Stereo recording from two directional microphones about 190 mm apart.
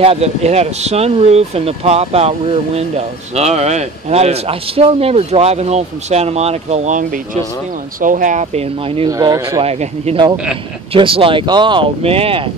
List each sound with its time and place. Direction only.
0.0 s a man's voice: 30° right (ahead or behind)
9.1 s speech: 20° right (ahead or behind)
9.7 s a man's voice: 35° right (ahead or behind)
10.3 s speech: 5° right (ahead or behind)
10.9 s speech: 30° right (ahead or behind)